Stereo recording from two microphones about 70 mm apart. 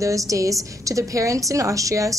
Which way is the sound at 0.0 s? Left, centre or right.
Right.